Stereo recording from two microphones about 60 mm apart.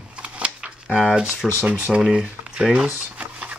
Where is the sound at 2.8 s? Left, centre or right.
Right.